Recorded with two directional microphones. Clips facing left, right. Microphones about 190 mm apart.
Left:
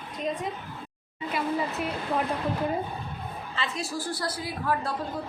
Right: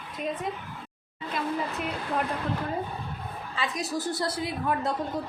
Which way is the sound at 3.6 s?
20° right (ahead or behind).